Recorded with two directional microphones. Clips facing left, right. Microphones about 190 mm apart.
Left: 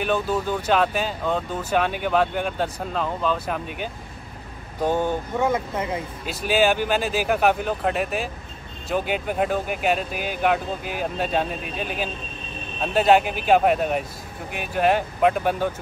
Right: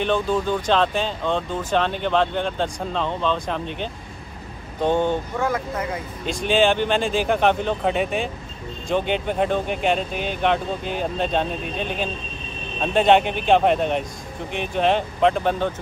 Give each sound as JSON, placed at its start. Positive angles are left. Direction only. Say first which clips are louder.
{"t": 0.0, "sound": "speech", "louder": "right 2 dB", "side_deg": 10}
{"t": 5.4, "sound": "speech", "louder": "left 1 dB", "side_deg": 25}
{"t": 6.2, "sound": "speech", "louder": "right 2 dB", "side_deg": 5}